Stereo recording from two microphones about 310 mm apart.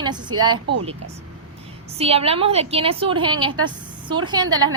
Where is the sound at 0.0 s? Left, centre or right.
Centre.